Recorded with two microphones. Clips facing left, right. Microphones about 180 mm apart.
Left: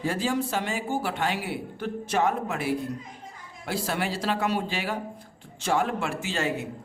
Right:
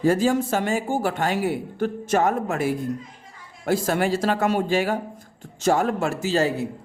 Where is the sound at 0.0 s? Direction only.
45° right (ahead or behind).